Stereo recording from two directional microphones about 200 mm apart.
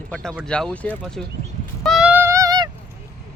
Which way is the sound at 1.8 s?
Centre (ahead or behind).